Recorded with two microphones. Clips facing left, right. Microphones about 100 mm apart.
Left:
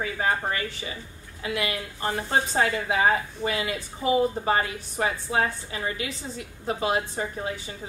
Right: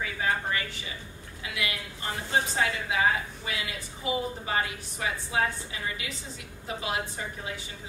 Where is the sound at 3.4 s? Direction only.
45° left (ahead or behind).